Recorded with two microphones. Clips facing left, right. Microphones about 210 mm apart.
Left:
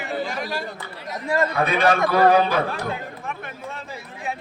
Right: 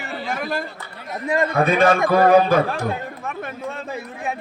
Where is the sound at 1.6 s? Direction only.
45° right (ahead or behind).